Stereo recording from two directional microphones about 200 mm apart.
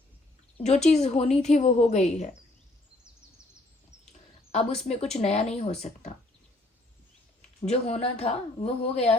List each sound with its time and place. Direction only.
0.9 s speech: 35° left (ahead or behind)
4.5 s speech: 30° left (ahead or behind)
7.6 s speech: 35° left (ahead or behind)